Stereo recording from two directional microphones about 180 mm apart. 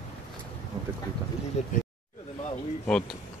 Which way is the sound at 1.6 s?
40° left (ahead or behind).